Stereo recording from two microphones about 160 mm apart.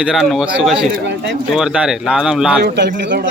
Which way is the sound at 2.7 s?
90° right.